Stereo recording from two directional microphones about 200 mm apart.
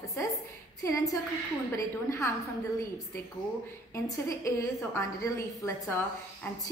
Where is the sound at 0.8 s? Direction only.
15° left (ahead or behind).